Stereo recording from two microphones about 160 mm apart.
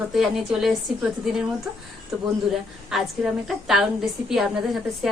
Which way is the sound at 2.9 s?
Centre (ahead or behind).